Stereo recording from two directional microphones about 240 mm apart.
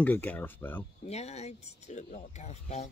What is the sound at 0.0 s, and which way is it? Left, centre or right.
Speech, centre.